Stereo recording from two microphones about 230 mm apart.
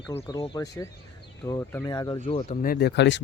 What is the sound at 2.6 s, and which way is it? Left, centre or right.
Speech, left.